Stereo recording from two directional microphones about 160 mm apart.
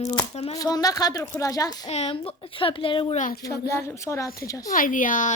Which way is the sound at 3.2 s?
60° left (ahead or behind).